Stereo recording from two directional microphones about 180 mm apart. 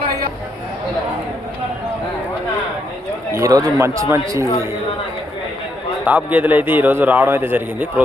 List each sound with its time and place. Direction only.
3.3 s a man's voice: 20° right (ahead or behind)
6.1 s a man's voice: 10° right (ahead or behind)